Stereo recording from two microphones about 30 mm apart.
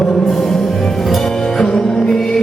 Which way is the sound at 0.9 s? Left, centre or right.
Centre.